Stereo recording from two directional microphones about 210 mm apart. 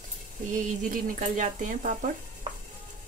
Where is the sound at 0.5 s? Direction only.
40° right (ahead or behind).